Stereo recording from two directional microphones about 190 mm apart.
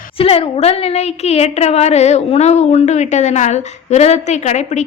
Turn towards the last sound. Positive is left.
turn(degrees=40)  # may be behind; listen again after turning